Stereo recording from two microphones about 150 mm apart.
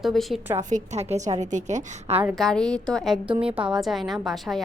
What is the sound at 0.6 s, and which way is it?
A woman's voice, 55° right (ahead or behind).